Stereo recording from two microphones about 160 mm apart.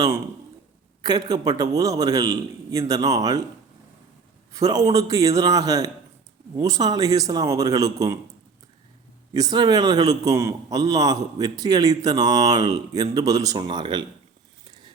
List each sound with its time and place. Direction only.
1.0 s a man's voice: 25° right (ahead or behind)
4.5 s a man's voice: 25° right (ahead or behind)
9.3 s a man's voice: 25° right (ahead or behind)